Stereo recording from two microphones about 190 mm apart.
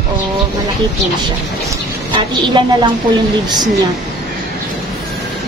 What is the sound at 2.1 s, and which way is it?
Speech, 25° right (ahead or behind).